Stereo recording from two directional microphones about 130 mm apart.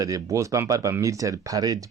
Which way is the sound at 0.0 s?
25° right (ahead or behind).